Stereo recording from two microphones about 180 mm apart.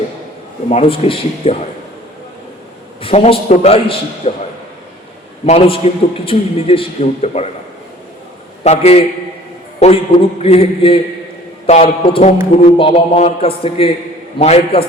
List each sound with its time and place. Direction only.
0.7 s a man's voice: 35° left (ahead or behind)
3.0 s a man's voice: 30° left (ahead or behind)
5.5 s a man's voice: 30° left (ahead or behind)
8.6 s a man's voice: 35° left (ahead or behind)